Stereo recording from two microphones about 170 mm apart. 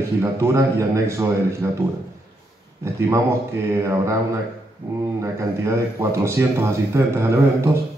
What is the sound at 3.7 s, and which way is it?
Speech, 15° right (ahead or behind).